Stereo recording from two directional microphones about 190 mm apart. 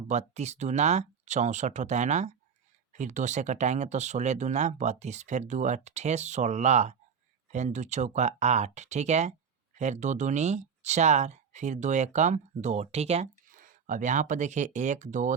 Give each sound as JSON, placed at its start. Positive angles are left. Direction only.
{"t": 0.1, "sound": "speech", "side_deg": -35}